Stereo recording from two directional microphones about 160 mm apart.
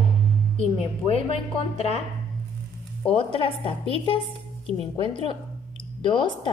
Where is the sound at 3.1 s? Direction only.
35° left (ahead or behind).